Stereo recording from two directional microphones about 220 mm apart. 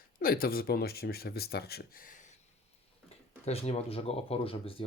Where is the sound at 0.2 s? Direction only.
40° left (ahead or behind).